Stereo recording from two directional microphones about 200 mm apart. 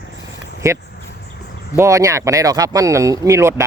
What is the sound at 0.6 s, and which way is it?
Speech, 15° right (ahead or behind).